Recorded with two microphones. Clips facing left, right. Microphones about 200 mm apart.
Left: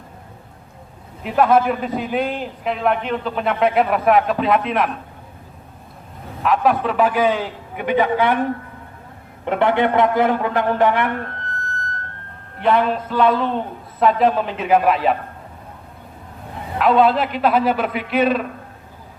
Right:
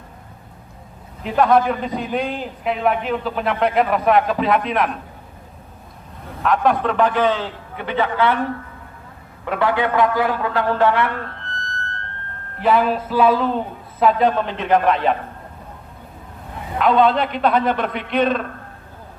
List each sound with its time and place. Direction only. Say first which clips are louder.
1.2 s a man's voice: even; 5° left (ahead or behind)
6.4 s a man's voice: even; 5° left (ahead or behind)
12.5 s a man's voice: even; centre (ahead or behind)
16.7 s a man's voice: left 1 dB; centre (ahead or behind)